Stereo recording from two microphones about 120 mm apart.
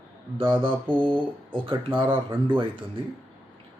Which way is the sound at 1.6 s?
45° right (ahead or behind).